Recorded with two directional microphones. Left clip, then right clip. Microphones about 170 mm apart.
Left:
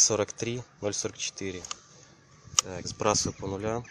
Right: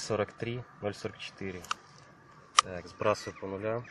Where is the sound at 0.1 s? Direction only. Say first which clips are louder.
Left 3 dB; 20° left (ahead or behind).